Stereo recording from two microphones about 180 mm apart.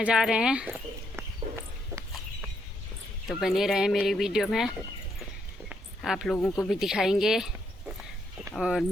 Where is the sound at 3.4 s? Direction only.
Centre (ahead or behind).